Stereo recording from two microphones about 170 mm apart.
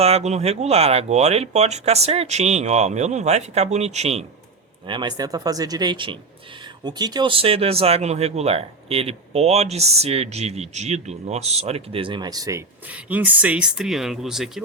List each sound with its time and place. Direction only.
0.0 s speech: 40° right (ahead or behind)
4.9 s speech: 25° right (ahead or behind)
12.9 s speech: 10° right (ahead or behind)